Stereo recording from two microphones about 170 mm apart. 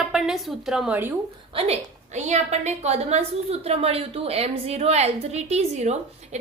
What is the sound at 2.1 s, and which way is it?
A woman's voice, 40° right (ahead or behind).